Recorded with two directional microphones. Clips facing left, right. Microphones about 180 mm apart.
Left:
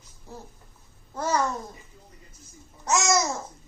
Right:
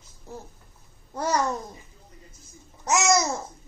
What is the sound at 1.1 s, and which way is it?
Babbling, 15° right (ahead or behind).